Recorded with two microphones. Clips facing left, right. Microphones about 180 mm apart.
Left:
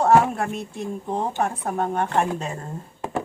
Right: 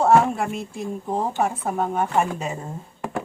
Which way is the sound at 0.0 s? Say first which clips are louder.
Even; centre (ahead or behind).